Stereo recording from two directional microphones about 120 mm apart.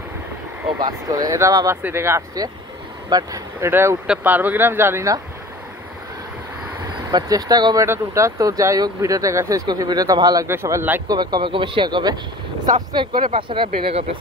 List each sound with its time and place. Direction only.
0.8 s speech: 30° right (ahead or behind)
3.1 s speech: 30° right (ahead or behind)
4.1 s speech: 15° right (ahead or behind)
7.1 s speech: 35° right (ahead or behind)
10.5 s speech: 20° right (ahead or behind)
11.1 s speech: 35° right (ahead or behind)